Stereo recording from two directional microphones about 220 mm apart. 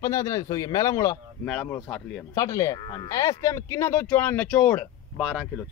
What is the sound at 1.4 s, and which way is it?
A man's voice, 5° left (ahead or behind).